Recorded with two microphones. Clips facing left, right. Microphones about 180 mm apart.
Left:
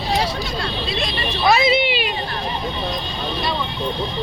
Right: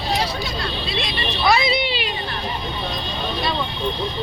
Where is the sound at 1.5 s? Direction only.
20° left (ahead or behind).